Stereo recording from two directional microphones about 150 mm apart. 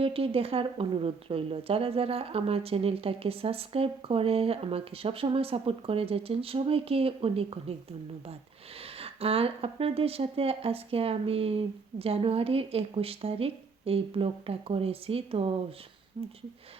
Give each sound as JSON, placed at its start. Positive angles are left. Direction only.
{"t": 0.0, "sound": "speech", "side_deg": -40}
{"t": 8.8, "sound": "speech", "side_deg": -40}